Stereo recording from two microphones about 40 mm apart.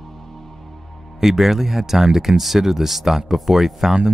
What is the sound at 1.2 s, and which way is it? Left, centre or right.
Speech, centre.